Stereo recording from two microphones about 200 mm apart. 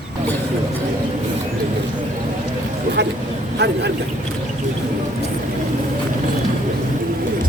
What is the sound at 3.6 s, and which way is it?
Vehicle, 55° right (ahead or behind).